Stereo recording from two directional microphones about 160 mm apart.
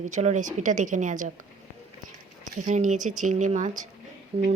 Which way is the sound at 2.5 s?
55° right (ahead or behind).